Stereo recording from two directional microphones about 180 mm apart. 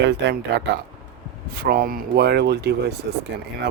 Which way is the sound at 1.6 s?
60° right (ahead or behind).